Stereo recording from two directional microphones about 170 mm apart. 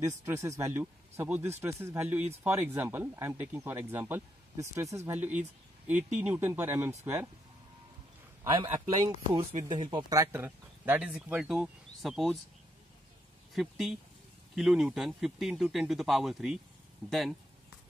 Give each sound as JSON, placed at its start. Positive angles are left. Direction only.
{"t": 0.0, "sound": "speech", "side_deg": -15}
{"t": 5.9, "sound": "speech", "side_deg": -45}
{"t": 6.2, "sound": "speech", "side_deg": -10}
{"t": 8.9, "sound": "speech", "side_deg": -30}
{"t": 13.6, "sound": "speech", "side_deg": 0}